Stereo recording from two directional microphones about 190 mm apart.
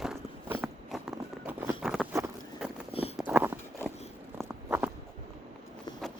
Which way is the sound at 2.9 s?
30° left (ahead or behind).